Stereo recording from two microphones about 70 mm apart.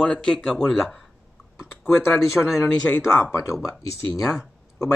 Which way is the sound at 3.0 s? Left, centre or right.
Left.